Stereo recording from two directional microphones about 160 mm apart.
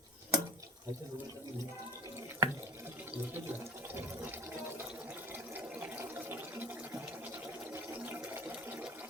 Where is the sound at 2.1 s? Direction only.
15° right (ahead or behind).